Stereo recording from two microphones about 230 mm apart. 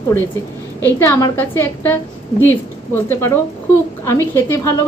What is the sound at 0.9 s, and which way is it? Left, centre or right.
A woman's voice, centre.